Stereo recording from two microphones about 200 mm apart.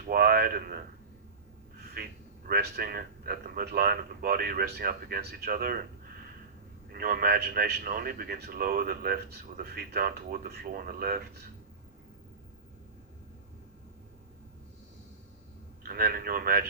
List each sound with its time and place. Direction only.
0.1 s a sound: 50° right (ahead or behind)
2.0 s a man's voice: 45° right (ahead or behind)
6.9 s a man's voice: 45° right (ahead or behind)
15.8 s speech: 50° right (ahead or behind)